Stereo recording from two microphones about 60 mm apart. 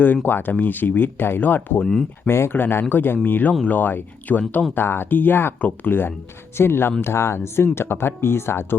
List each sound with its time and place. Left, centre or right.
0.3 s speech: left
1.8 s speech: centre
2.2 s speech: left